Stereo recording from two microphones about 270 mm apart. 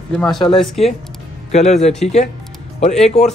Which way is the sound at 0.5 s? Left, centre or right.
Centre.